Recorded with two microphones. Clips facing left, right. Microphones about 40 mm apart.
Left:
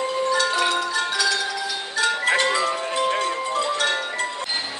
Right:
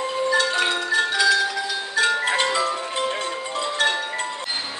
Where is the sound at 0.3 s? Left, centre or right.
Centre.